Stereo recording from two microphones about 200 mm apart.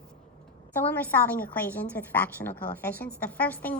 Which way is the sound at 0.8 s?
10° left (ahead or behind).